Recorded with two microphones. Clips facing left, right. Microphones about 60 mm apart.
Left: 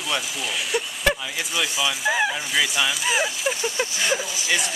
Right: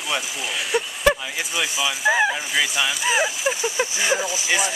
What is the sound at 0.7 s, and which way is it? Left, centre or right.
Speech, centre.